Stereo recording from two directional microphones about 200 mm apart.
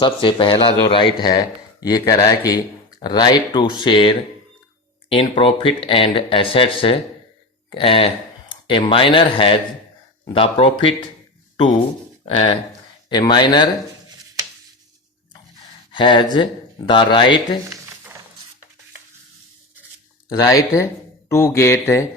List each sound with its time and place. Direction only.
0.0 s speech: 25° left (ahead or behind)
12.2 s speech: 30° left (ahead or behind)
15.9 s speech: 25° left (ahead or behind)
20.3 s speech: 15° left (ahead or behind)